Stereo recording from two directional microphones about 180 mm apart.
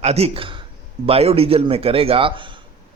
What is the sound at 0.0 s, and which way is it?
A man's voice, 35° right (ahead or behind).